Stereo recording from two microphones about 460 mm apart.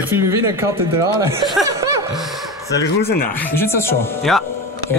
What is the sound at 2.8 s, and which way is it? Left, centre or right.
Speech, centre.